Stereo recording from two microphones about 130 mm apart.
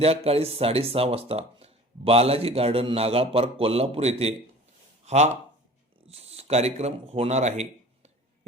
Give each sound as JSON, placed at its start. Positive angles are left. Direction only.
{"t": 0.0, "sound": "speech", "side_deg": -50}